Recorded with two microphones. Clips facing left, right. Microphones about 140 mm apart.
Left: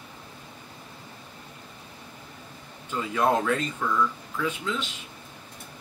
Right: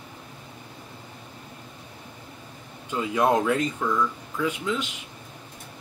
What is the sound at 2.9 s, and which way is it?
Speech, 15° right (ahead or behind).